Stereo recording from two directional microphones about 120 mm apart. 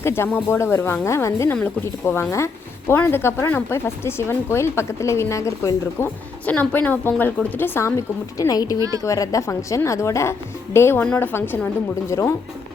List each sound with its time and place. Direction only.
0.0 s speech: 20° left (ahead or behind)
6.4 s a woman's voice: 15° left (ahead or behind)